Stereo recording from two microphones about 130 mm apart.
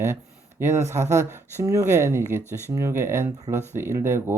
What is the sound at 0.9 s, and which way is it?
Speech, 20° right (ahead or behind).